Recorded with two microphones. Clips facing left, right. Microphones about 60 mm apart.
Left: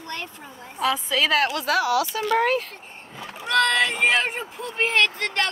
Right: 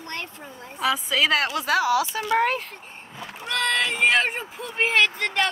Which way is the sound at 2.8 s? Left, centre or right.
Centre.